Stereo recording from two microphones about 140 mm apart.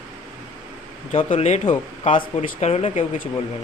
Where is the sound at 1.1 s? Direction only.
55° left (ahead or behind).